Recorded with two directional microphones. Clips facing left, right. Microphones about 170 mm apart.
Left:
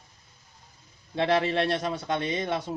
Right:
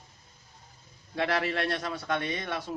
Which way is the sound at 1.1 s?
25° left (ahead or behind).